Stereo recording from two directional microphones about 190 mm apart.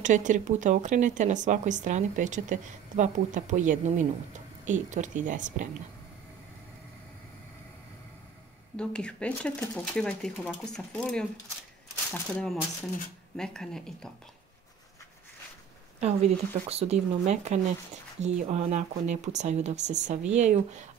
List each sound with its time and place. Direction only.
0.0 s speech: 40° right (ahead or behind)
8.7 s speech: 5° left (ahead or behind)
16.0 s speech: 35° right (ahead or behind)